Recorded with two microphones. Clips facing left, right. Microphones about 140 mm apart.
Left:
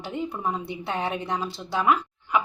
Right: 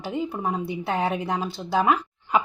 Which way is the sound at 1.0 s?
Centre (ahead or behind).